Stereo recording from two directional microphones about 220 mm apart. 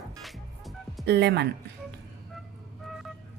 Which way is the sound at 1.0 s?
50° right (ahead or behind).